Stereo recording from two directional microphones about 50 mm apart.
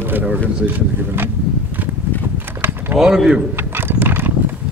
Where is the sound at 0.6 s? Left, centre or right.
Right.